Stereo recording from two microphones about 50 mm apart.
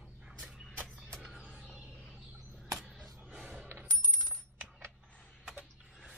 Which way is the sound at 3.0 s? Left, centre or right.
Right.